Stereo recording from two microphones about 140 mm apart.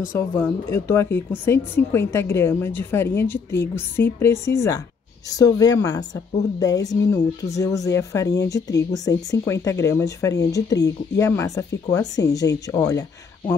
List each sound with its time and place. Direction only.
0.4 s speech: 15° left (ahead or behind)